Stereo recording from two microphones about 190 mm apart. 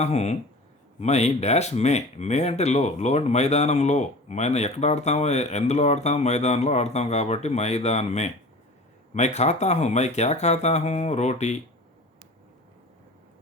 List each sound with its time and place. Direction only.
0.0 s speech: 35° left (ahead or behind)